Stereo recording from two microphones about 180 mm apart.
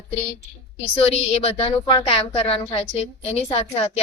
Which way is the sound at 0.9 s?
30° left (ahead or behind).